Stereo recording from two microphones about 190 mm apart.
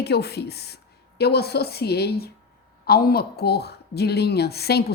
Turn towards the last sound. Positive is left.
turn(degrees=55)  # may be behind; listen again after turning